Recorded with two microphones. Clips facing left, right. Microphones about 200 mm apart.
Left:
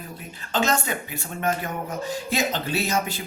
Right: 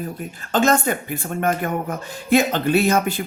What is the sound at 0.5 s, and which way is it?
A man's voice, 50° right (ahead or behind).